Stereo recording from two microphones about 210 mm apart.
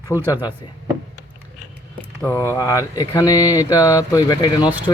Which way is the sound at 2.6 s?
15° left (ahead or behind).